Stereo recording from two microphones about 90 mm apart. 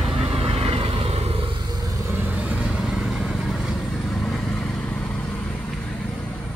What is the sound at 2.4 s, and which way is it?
Vehicle, 10° right (ahead or behind).